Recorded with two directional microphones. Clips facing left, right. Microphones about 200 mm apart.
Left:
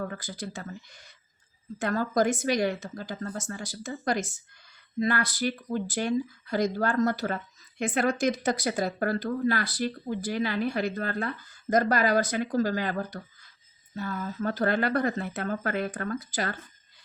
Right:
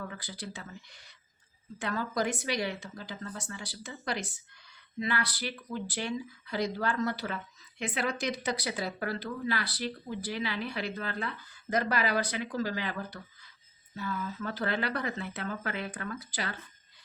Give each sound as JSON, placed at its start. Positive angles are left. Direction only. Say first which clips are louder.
{"t": 0.0, "sound": "speech", "louder": "left 6 dB", "side_deg": 45}